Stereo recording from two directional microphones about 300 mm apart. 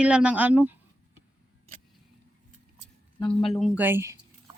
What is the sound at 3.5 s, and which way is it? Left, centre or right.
Speech, centre.